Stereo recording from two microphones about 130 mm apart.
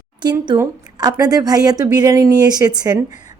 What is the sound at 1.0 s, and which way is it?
A woman's voice, 30° right (ahead or behind).